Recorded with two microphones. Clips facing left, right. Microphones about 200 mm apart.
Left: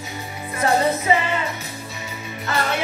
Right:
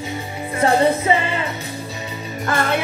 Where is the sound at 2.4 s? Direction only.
50° right (ahead or behind).